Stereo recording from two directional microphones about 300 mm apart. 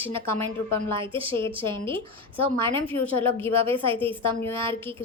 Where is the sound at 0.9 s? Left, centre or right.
Centre.